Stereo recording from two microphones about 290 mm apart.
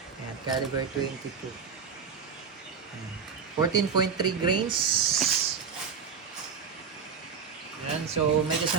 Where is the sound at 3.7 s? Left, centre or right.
Centre.